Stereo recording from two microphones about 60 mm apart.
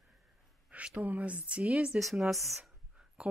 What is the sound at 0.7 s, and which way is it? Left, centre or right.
Speech, right.